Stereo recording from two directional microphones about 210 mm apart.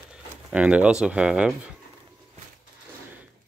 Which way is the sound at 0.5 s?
5° right (ahead or behind).